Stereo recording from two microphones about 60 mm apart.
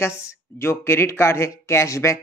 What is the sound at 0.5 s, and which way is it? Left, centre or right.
Speech, left.